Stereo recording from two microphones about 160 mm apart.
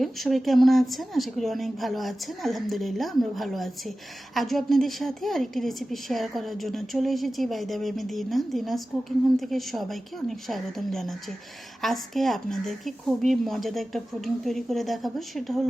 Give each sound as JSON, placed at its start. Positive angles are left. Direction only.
{"t": 0.0, "sound": "a woman's voice", "side_deg": 0}